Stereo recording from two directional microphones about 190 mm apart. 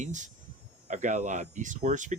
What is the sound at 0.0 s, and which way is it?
Speech, 40° right (ahead or behind).